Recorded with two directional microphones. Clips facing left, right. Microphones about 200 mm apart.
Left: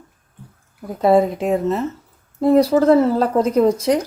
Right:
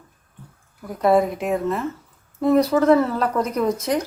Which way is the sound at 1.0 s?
30° left (ahead or behind).